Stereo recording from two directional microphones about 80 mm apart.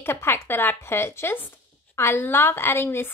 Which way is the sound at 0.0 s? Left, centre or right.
Left.